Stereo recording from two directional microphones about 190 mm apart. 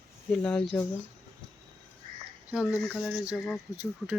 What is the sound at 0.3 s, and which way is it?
Speech, 5° left (ahead or behind).